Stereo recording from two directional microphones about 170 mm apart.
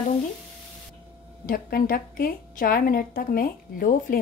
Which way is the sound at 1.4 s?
55° left (ahead or behind).